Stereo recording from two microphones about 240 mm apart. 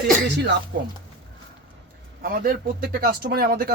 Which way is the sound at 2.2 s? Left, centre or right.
Right.